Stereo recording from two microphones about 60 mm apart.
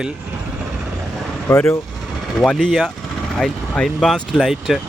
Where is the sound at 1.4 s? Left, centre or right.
Left.